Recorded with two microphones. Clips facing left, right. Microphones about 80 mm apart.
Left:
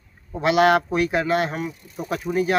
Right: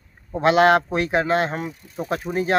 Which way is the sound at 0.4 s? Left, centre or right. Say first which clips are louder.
Right 2 dB; right.